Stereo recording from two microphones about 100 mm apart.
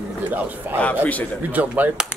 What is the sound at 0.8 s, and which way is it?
Speech, 15° left (ahead or behind).